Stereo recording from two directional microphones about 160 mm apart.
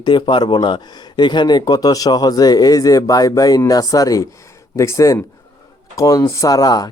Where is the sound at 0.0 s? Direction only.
30° left (ahead or behind).